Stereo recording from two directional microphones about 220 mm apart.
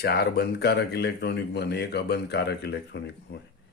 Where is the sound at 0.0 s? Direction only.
45° left (ahead or behind).